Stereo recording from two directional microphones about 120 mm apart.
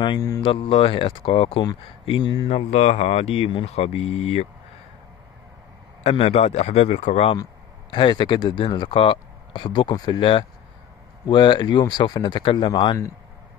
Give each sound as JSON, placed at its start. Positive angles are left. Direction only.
{"t": 0.0, "sound": "speech", "side_deg": 35}
{"t": 0.8, "sound": "speech", "side_deg": 45}
{"t": 2.4, "sound": "speech", "side_deg": 65}
{"t": 6.0, "sound": "speech", "side_deg": 60}
{"t": 7.9, "sound": "speech", "side_deg": 40}